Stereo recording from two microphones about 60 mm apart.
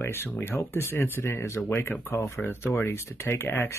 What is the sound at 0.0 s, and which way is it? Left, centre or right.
Speech, left.